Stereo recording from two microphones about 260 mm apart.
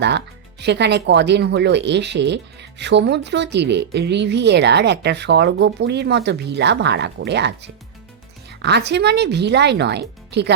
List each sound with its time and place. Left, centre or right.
0.6 s speech: right